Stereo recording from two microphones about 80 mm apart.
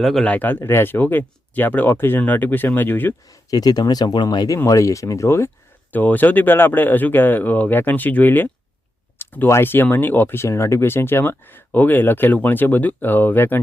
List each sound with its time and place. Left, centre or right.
0.0 s speech: centre
0.3 s speech: left
3.2 s speech: left
4.4 s speech: left
5.9 s speech: left